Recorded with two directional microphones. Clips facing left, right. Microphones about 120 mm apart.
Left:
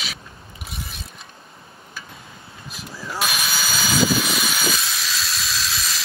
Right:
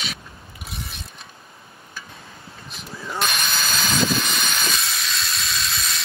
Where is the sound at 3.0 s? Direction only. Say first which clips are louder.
Even; 5° left (ahead or behind).